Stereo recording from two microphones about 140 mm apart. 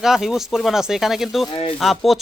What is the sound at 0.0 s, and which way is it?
A man's voice, 5° right (ahead or behind).